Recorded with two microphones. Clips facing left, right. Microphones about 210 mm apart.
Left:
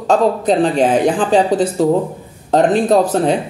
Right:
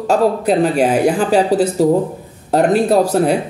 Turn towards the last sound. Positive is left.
turn(degrees=-10)  # may be behind; listen again after turning